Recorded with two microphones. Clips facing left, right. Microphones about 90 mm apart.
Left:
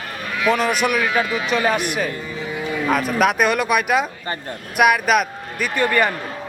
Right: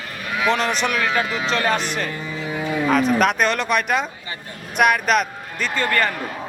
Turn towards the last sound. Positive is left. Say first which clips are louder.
# left 2 dB
turn(degrees=15)  # may be behind; listen again after turning